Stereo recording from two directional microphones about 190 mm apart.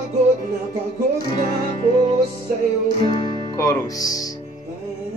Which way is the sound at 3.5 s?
15° left (ahead or behind).